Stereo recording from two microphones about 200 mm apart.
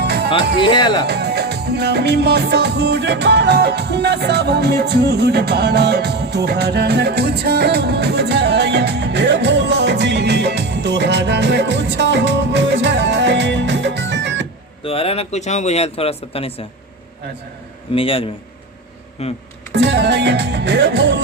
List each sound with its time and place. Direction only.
0.0 s music: 55° right (ahead or behind)
0.6 s speech: 20° left (ahead or behind)
1.0 s music: 55° right (ahead or behind)
14.8 s speech: 30° left (ahead or behind)
17.9 s speech: 25° left (ahead or behind)
19.7 s music: 60° right (ahead or behind)